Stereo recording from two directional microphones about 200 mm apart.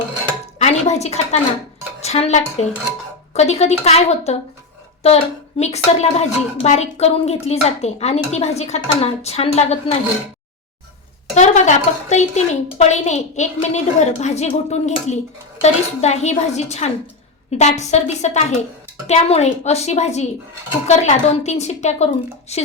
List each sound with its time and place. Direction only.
0.6 s a woman's voice: 35° left (ahead or behind)
11.3 s a woman's voice: 35° left (ahead or behind)